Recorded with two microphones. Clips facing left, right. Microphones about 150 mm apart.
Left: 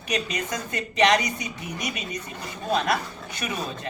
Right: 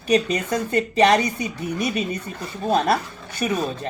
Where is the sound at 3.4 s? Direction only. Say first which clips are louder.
Right 8 dB; 30° right (ahead or behind).